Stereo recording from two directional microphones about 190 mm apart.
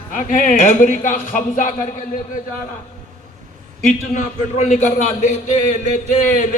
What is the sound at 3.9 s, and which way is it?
Speech, 40° left (ahead or behind).